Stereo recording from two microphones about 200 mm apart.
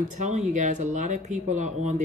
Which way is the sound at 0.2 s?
35° right (ahead or behind).